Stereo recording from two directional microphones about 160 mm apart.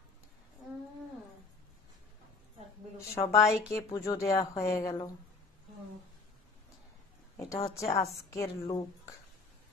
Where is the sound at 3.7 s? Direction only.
20° left (ahead or behind).